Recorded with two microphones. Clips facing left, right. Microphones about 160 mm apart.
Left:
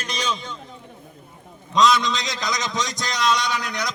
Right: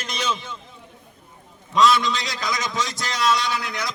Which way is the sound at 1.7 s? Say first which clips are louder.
Even; 20° left (ahead or behind).